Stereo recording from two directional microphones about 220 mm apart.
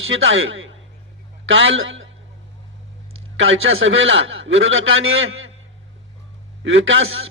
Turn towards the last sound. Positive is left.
turn(degrees=-60)  # may be behind; listen again after turning